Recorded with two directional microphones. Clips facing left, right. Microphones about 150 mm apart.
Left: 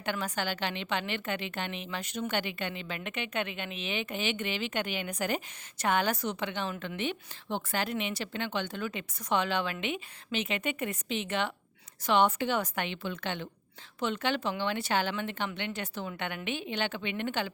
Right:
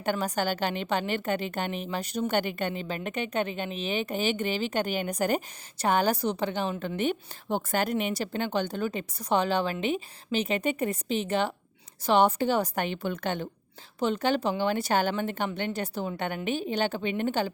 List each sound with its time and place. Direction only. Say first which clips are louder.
0.0 s a woman's voice: right 5 dB; 40° right (ahead or behind)